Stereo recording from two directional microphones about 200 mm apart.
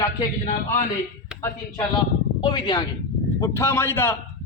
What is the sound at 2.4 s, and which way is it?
A man's voice, 20° left (ahead or behind).